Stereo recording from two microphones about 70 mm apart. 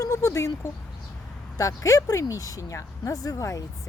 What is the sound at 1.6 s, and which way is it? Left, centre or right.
Speech, left.